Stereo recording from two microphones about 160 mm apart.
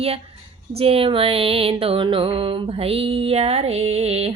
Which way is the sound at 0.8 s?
35° right (ahead or behind).